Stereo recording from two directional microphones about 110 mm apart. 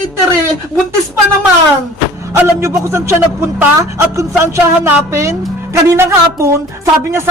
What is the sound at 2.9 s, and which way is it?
A woman's voice, 25° right (ahead or behind).